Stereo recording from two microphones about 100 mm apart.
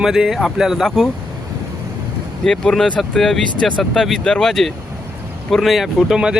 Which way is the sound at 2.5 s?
5° left (ahead or behind).